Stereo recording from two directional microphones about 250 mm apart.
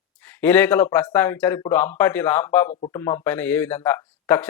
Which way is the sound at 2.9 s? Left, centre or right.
Centre.